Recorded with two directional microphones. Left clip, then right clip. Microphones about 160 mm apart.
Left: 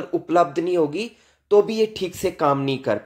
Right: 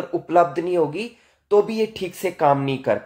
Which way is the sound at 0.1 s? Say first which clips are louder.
Right 1 dB; 30° left (ahead or behind).